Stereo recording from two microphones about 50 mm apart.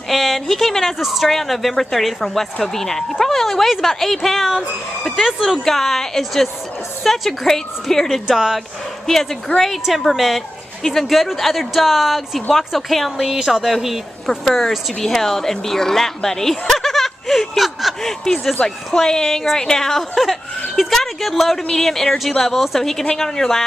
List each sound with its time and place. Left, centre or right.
0.1 s a woman's voice: centre
8.3 s speech: centre
9.0 s a woman's voice: centre
13.3 s a woman's voice: centre